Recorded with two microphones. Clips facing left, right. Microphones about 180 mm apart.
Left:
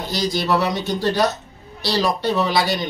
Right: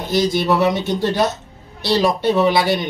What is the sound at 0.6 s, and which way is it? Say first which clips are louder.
A man's voice: right 4 dB; 20° right (ahead or behind).